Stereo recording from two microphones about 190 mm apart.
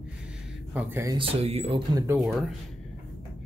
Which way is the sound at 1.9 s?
15° right (ahead or behind).